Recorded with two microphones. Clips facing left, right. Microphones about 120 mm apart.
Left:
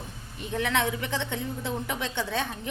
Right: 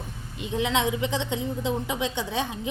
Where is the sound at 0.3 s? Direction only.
20° right (ahead or behind).